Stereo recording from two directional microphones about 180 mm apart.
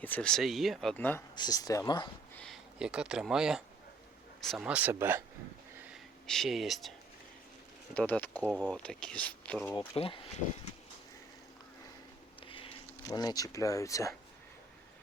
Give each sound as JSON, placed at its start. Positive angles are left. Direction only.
{"t": 0.0, "sound": "speech", "side_deg": 5}
{"t": 1.4, "sound": "speech", "side_deg": 20}
{"t": 2.3, "sound": "a sound", "side_deg": 5}
{"t": 2.7, "sound": "speech", "side_deg": -5}
{"t": 5.9, "sound": "speech", "side_deg": 0}
{"t": 7.9, "sound": "speech", "side_deg": 10}
{"t": 8.4, "sound": "speech", "side_deg": -5}
{"t": 9.7, "sound": "speech", "side_deg": 30}
{"t": 12.4, "sound": "speech", "side_deg": 30}